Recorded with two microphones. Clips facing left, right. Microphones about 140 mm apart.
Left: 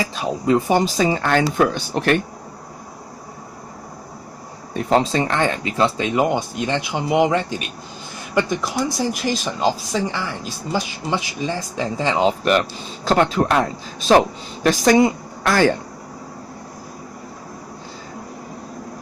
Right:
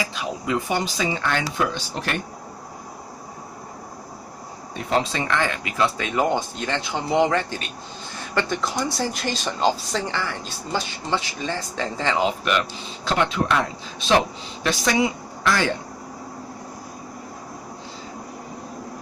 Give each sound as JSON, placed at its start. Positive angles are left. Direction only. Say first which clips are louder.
{"t": 0.1, "sound": "speech", "louder": "left 7 dB", "side_deg": 35}
{"t": 4.9, "sound": "speech", "louder": "left 5 dB", "side_deg": 35}
{"t": 13.1, "sound": "speech", "louder": "left 5 dB", "side_deg": 40}